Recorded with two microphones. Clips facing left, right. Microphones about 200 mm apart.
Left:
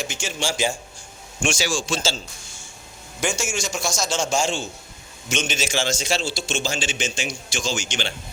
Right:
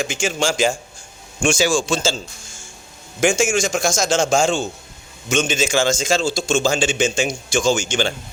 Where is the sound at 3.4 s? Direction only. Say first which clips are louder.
Right 9 dB; 90° right.